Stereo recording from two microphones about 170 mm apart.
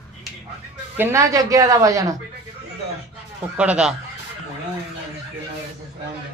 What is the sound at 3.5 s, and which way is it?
Speech, 5° right (ahead or behind).